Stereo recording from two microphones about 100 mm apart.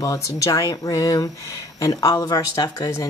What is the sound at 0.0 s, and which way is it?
Speech, 35° left (ahead or behind).